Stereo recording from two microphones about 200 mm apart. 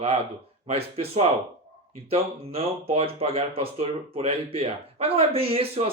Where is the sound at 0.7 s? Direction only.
30° right (ahead or behind).